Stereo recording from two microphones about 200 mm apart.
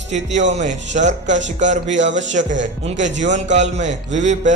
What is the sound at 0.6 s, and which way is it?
A man's voice, 35° right (ahead or behind).